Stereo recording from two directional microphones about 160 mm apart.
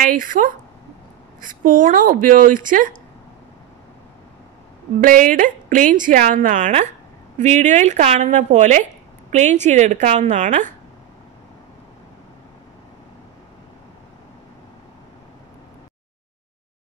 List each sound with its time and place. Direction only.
0.0 s a woman's voice: 60° right (ahead or behind)
5.0 s a woman's voice: 55° right (ahead or behind)